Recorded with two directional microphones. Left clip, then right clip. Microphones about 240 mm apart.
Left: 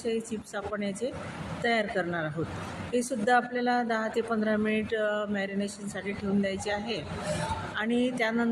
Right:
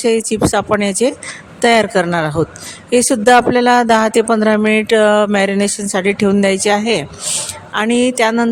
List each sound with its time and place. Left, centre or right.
0.0 s speech: right